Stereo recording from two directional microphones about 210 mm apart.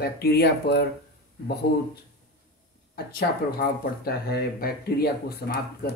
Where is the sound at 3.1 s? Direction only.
45° left (ahead or behind).